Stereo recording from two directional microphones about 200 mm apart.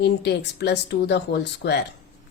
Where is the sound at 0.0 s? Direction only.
55° left (ahead or behind).